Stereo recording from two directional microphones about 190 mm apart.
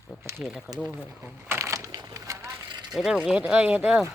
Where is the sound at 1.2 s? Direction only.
15° right (ahead or behind).